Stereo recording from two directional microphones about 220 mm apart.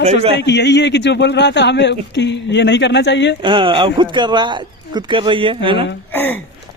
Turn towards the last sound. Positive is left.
turn(degrees=10)  # may be behind; listen again after turning